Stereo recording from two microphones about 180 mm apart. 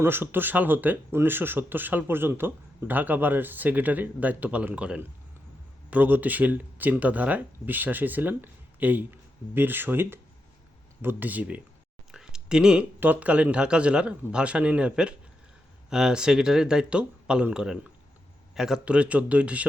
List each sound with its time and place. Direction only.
0.0 s speech: 10° right (ahead or behind)